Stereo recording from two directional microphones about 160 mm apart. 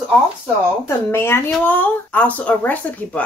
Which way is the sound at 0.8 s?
15° left (ahead or behind).